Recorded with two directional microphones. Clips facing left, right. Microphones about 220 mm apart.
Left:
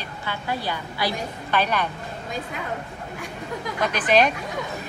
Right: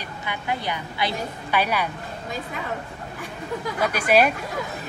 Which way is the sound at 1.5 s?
10° right (ahead or behind).